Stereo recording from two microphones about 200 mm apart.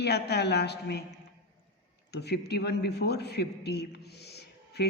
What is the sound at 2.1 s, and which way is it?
A man's voice, 55° left (ahead or behind).